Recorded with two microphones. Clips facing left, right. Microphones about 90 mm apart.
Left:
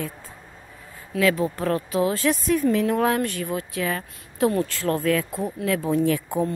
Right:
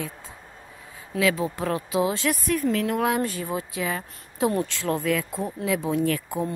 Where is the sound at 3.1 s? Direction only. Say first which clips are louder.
Left 1 dB; 20° right (ahead or behind).